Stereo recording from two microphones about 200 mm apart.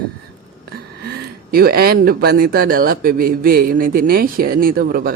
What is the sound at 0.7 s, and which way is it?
Speech, 50° right (ahead or behind).